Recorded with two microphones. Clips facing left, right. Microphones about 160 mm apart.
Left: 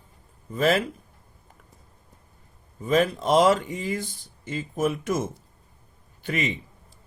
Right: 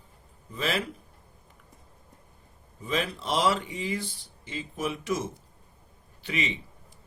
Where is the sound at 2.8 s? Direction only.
45° left (ahead or behind).